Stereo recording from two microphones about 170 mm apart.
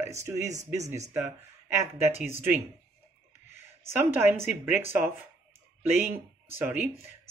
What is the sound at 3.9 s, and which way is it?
Speech, 15° right (ahead or behind).